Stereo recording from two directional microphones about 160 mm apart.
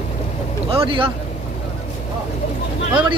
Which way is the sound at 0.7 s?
35° right (ahead or behind).